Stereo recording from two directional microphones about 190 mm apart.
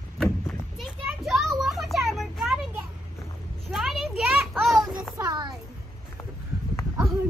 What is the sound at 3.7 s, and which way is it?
Children playing, centre (ahead or behind).